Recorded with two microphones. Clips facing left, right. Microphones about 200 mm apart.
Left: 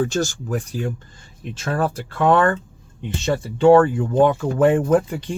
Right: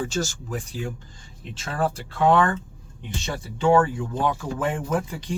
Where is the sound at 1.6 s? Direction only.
50° left (ahead or behind).